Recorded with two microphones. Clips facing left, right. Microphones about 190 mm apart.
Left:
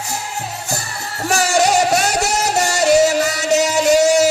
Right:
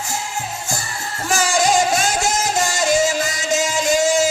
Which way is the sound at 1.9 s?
65° left (ahead or behind).